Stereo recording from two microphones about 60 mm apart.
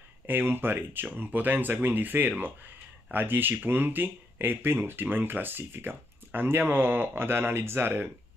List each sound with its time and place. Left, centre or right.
0.3 s speech: right